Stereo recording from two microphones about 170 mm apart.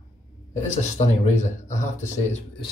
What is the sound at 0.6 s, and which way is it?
Speech, 45° left (ahead or behind).